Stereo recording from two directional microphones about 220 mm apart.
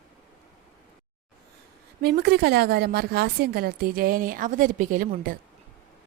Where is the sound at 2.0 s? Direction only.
45° right (ahead or behind).